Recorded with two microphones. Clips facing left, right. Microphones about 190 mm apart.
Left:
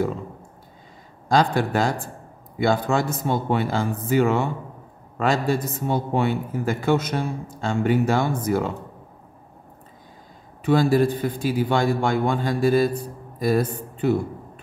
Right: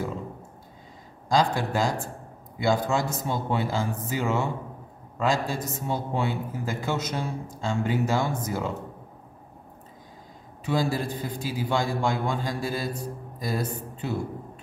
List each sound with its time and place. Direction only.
1.3 s a man's voice: 60° left (ahead or behind)
10.6 s a man's voice: 60° left (ahead or behind)